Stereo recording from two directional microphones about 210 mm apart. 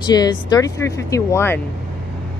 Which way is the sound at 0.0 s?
20° left (ahead or behind).